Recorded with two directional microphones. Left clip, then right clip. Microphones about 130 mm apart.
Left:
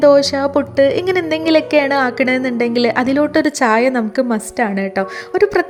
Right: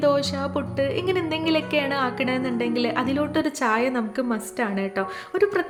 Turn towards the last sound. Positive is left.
turn(degrees=50)  # may be behind; listen again after turning